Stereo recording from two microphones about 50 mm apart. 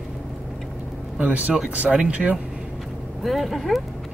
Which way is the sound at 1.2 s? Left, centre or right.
Right.